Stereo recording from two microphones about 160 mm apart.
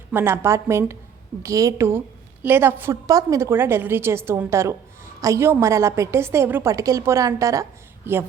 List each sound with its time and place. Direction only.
0.1 s a woman's voice: 15° right (ahead or behind)